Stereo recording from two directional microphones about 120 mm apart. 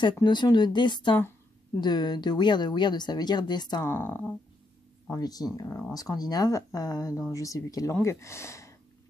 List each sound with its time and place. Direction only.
0.0 s speech: 40° left (ahead or behind)
3.8 s speech: 20° left (ahead or behind)
5.1 s speech: 30° left (ahead or behind)